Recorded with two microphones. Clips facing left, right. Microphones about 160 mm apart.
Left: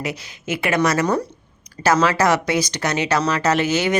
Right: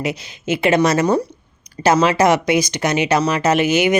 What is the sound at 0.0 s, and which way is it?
A woman's voice, 25° right (ahead or behind).